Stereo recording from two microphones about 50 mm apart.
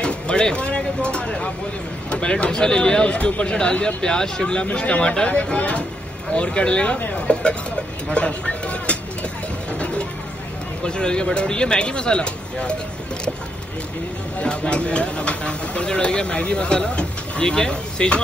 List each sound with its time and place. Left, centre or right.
0.0 s speech: centre
9.7 s music: left
10.8 s speech: centre
14.4 s speech: left